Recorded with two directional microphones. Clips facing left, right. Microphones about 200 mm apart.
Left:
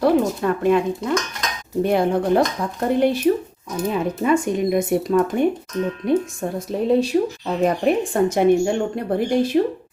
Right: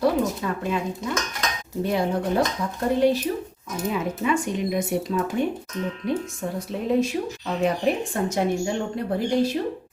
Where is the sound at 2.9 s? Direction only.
55° left (ahead or behind).